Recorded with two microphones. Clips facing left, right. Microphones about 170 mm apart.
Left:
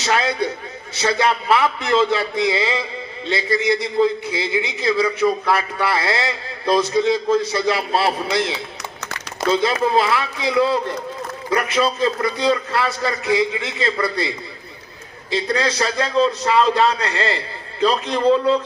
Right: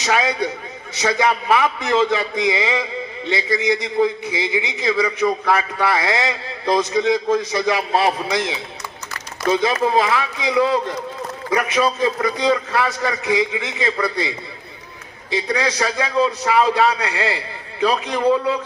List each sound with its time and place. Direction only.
0.0 s a man's voice: 15° right (ahead or behind)